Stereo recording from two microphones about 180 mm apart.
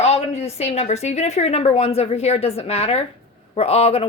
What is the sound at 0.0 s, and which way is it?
A woman's voice, 35° left (ahead or behind).